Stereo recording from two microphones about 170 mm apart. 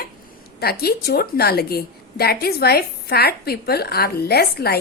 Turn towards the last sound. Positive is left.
turn(degrees=70)  # may be behind; listen again after turning